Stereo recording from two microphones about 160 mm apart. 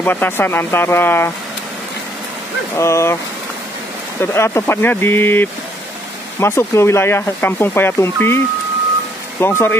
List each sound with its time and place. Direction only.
0.0 s speech: 10° left (ahead or behind)
2.7 s speech: 15° left (ahead or behind)
4.2 s speech: 15° left (ahead or behind)
9.4 s speech: 15° left (ahead or behind)